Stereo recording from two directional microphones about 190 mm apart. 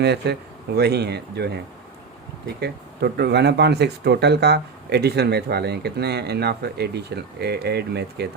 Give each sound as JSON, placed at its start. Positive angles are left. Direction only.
{"t": 0.0, "sound": "speech", "side_deg": -60}